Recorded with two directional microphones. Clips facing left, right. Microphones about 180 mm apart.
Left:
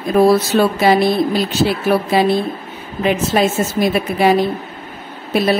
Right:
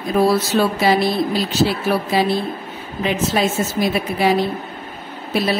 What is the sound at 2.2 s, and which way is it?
A woman's voice, 55° left (ahead or behind).